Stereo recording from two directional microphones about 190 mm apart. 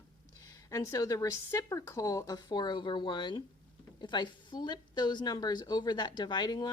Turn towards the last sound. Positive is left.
turn(degrees=20)  # may be behind; listen again after turning